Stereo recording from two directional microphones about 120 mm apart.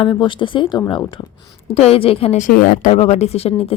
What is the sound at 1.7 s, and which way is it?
Speech, 55° left (ahead or behind).